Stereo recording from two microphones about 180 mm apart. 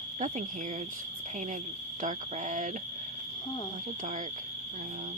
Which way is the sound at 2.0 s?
45° right (ahead or behind).